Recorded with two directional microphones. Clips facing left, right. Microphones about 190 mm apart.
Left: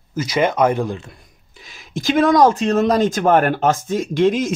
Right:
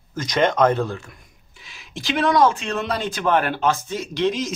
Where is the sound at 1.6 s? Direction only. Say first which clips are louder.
Left 7 dB; 45° left (ahead or behind).